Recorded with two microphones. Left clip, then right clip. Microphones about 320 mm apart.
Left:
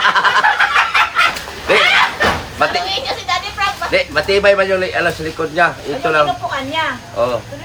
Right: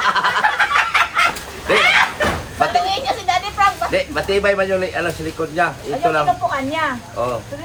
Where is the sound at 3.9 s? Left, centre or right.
Left.